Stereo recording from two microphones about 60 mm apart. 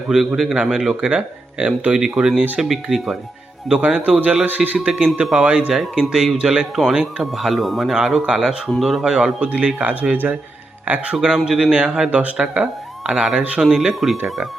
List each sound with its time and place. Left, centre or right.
0.1 s speech: centre
0.5 s speech: centre
3.8 s speech: centre
5.1 s speech: centre
5.7 s speech: centre; by 11.2 s right
11.4 s speech: centre
13.1 s speech: centre